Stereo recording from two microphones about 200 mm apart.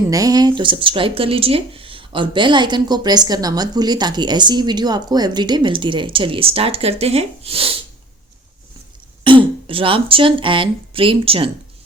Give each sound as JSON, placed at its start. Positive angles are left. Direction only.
{"t": 0.1, "sound": "speech", "side_deg": -20}
{"t": 9.2, "sound": "speech", "side_deg": -25}